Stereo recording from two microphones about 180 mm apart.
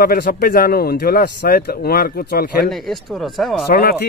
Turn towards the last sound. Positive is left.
turn(degrees=55)  # may be behind; listen again after turning